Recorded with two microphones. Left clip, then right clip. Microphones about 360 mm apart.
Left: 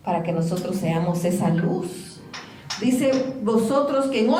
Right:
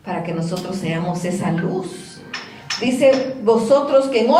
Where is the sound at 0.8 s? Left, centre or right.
Centre.